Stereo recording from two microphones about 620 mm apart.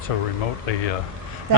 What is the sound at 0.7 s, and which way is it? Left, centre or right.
Speech, left.